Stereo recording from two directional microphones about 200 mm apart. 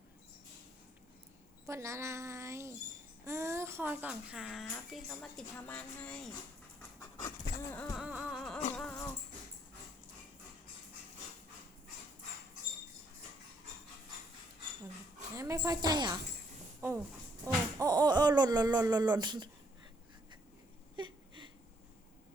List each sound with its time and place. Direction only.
1.6 s speech: 15° right (ahead or behind); by 6.3 s 5° left (ahead or behind)
7.0 s dog: 15° left (ahead or behind)
7.9 s music: 5° right (ahead or behind)
8.7 s dog: 10° left (ahead or behind)
15.4 s a woman's voice: 15° right (ahead or behind)
17.4 s a sound: 20° right (ahead or behind)
20.9 s a sound: 25° right (ahead or behind)